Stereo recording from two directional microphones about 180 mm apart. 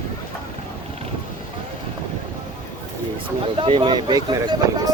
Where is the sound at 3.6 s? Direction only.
25° right (ahead or behind).